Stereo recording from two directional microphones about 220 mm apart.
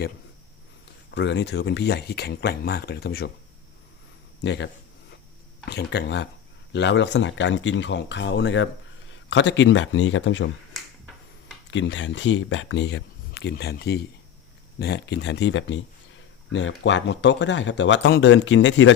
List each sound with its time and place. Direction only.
1.1 s speech: 50° left (ahead or behind)
4.4 s speech: 50° left (ahead or behind)
11.7 s speech: 55° left (ahead or behind)